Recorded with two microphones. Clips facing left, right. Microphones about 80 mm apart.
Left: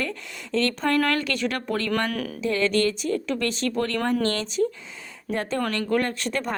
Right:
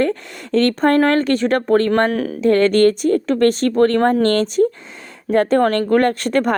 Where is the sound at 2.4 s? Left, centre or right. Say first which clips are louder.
Right 10 dB; right.